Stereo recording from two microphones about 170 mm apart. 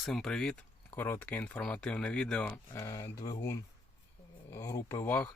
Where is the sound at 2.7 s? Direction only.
20° left (ahead or behind).